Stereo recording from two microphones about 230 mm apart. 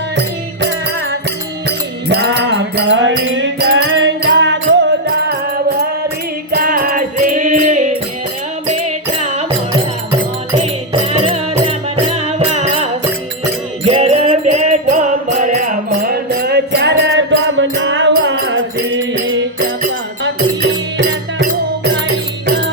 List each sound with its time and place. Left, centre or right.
1.6 s music: right
6.5 s music: right
10.1 s music: right
20.2 s music: right